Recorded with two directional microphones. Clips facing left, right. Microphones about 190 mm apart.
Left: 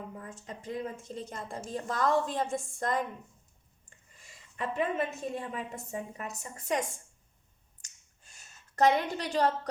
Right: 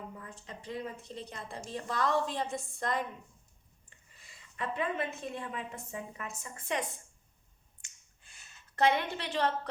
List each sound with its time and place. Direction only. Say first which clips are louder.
0.2 s a woman's voice: left 4 dB; 45° left (ahead or behind)
3.8 s a sound: left 3 dB; 45° left (ahead or behind)
5.4 s a woman's voice: left 2 dB; 35° left (ahead or behind)
7.8 s finger snapping: left 1 dB; 40° left (ahead or behind)